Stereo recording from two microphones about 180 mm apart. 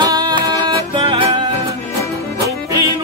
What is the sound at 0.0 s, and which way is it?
Music, 25° right (ahead or behind).